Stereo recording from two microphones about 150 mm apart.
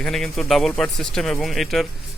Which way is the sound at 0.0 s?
Centre (ahead or behind).